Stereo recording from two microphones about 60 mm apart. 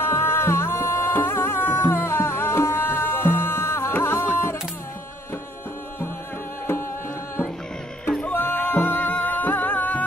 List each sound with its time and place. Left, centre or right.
0.0 s music: left
8.3 s music: left